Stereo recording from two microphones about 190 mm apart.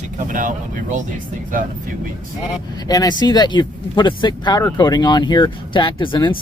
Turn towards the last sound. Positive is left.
turn(degrees=25)  # may be behind; listen again after turning